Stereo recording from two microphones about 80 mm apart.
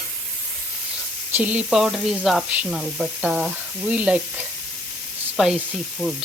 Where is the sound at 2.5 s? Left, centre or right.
Centre.